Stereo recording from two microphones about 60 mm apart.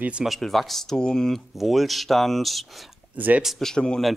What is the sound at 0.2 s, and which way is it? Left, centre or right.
Speech, centre.